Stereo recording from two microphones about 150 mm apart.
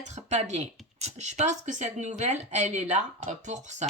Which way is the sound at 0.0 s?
50° right (ahead or behind).